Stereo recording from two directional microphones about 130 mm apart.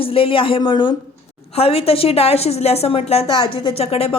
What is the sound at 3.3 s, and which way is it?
Speech, 40° left (ahead or behind).